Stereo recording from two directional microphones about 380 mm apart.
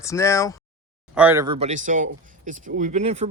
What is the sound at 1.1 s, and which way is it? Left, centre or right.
Speech, centre.